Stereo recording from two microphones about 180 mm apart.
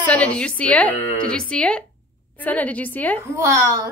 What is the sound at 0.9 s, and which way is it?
Speech, 35° left (ahead or behind).